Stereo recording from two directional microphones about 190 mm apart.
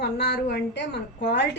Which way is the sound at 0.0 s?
60° left (ahead or behind).